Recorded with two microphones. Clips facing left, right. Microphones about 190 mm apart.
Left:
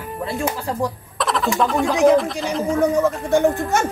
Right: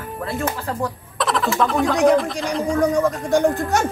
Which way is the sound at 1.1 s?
Centre (ahead or behind).